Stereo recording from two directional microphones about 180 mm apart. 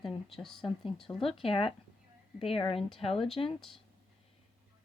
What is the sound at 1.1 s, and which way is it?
Speech, 30° left (ahead or behind).